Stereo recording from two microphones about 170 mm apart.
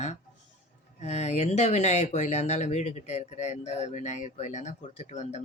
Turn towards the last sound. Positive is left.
turn(degrees=40)  # may be behind; listen again after turning